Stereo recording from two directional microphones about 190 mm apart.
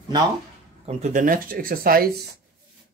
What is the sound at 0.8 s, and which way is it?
Speech, 40° right (ahead or behind).